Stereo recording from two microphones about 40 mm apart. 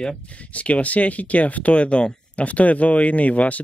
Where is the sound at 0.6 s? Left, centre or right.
Left.